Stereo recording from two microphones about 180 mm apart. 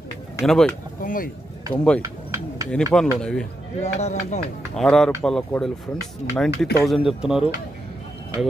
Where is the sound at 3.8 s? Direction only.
35° left (ahead or behind).